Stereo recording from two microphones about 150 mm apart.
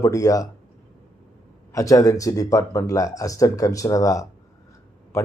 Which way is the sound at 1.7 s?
20° left (ahead or behind).